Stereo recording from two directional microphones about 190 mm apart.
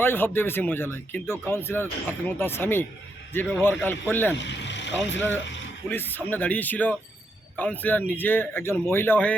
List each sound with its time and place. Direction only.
0.0 s speech: 10° left (ahead or behind)
4.4 s speech: 70° left (ahead or behind)
5.1 s speech: 10° left (ahead or behind)